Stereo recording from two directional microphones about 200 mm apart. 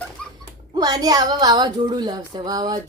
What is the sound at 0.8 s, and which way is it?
A woman's voice, 20° right (ahead or behind).